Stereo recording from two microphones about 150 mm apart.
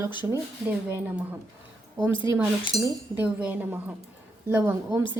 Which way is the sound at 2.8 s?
10° right (ahead or behind).